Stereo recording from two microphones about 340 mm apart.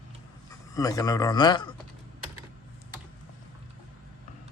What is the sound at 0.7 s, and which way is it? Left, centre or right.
A man's voice, centre.